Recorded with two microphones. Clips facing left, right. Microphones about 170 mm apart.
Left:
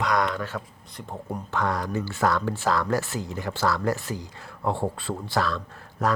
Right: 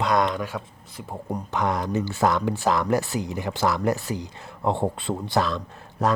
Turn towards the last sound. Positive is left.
turn(degrees=-20)  # may be behind; listen again after turning